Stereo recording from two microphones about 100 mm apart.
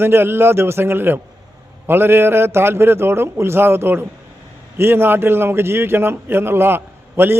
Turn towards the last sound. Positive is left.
turn(degrees=-20)  # may be behind; listen again after turning